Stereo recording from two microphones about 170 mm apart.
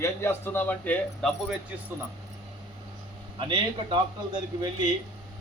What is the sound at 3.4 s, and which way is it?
Speech, 30° right (ahead or behind).